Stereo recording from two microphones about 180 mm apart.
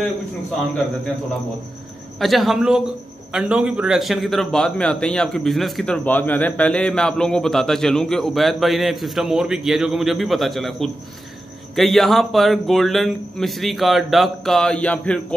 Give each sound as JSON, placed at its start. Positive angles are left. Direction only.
{"t": 2.1, "sound": "a man's voice", "side_deg": 0}